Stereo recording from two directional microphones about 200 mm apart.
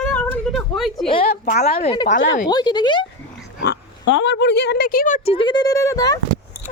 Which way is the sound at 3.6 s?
60° left (ahead or behind).